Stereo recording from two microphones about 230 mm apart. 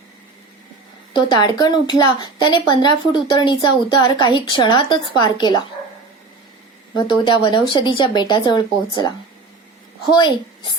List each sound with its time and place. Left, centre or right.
1.1 s a woman's voice: centre
7.5 s a woman's voice: left
10.2 s a woman's voice: centre